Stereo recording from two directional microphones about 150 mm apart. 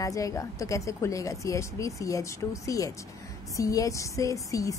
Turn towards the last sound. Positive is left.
turn(degrees=20)  # may be behind; listen again after turning